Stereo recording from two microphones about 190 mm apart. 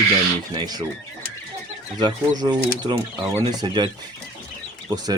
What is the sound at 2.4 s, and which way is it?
Speech, 20° right (ahead or behind).